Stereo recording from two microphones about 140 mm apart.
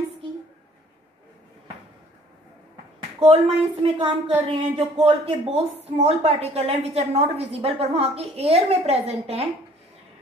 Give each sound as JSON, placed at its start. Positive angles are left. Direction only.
{"t": 3.2, "sound": "a woman's voice", "side_deg": -45}